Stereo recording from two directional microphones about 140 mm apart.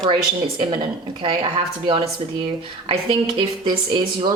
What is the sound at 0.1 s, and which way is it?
Speech, 35° right (ahead or behind).